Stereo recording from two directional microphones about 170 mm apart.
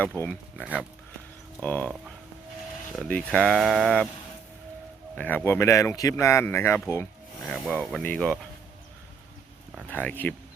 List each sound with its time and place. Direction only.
0.2 s speech: 10° left (ahead or behind)
0.6 s speech: 10° right (ahead or behind)
1.6 s speech: 10° left (ahead or behind)
3.1 s speech: 5° left (ahead or behind)
5.1 s speech: 10° left (ahead or behind)
9.9 s speech: 10° left (ahead or behind)